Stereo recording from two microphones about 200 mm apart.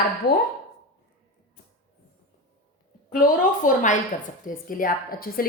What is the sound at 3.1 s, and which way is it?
A woman's voice, 45° left (ahead or behind).